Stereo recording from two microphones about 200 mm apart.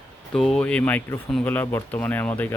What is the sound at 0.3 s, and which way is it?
Speech, centre (ahead or behind).